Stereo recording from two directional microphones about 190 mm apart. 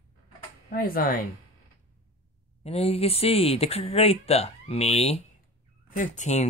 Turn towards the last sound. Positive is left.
turn(degrees=40)  # may be behind; listen again after turning